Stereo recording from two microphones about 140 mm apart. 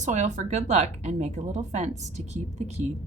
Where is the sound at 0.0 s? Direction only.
60° right (ahead or behind).